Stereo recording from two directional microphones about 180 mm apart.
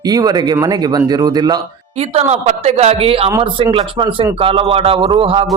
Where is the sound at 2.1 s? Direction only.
35° right (ahead or behind).